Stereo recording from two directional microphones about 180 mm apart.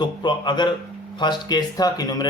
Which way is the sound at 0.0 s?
25° left (ahead or behind).